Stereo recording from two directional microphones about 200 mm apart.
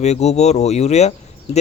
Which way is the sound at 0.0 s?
35° left (ahead or behind).